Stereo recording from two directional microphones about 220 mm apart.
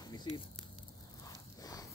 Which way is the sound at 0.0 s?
20° left (ahead or behind).